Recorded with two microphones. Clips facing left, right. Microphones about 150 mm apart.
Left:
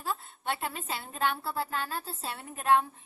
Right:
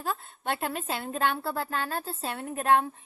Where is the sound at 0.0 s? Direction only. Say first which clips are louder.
Right 2 dB; 55° right (ahead or behind).